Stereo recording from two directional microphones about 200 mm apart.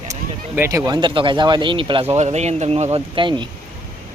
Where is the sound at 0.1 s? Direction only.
15° right (ahead or behind).